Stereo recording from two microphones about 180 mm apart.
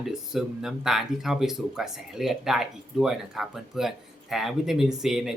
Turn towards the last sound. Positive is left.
turn(degrees=0)  # may be behind; listen again after turning